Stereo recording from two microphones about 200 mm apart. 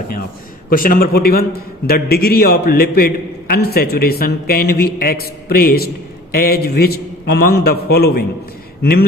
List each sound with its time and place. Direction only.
0.7 s a man's voice: 45° left (ahead or behind)